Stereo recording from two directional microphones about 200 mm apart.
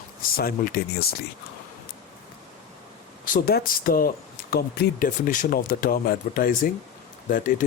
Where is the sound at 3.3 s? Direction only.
50° left (ahead or behind).